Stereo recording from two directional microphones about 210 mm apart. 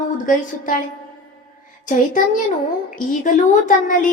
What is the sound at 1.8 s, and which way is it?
Speech, 40° left (ahead or behind).